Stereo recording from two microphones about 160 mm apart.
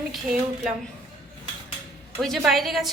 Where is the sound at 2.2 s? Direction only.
Centre (ahead or behind).